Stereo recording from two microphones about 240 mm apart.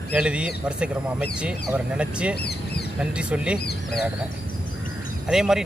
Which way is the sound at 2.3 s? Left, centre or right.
Left.